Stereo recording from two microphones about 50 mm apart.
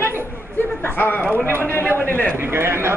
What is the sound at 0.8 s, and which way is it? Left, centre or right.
A man's voice, left.